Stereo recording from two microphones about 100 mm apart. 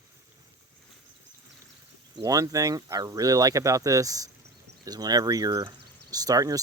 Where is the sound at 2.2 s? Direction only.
35° right (ahead or behind).